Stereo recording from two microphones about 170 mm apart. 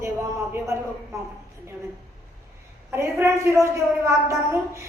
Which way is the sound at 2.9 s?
15° right (ahead or behind).